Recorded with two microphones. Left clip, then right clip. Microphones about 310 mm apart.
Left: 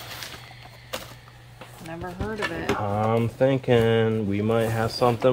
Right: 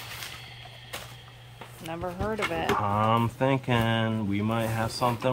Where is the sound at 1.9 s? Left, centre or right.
Centre.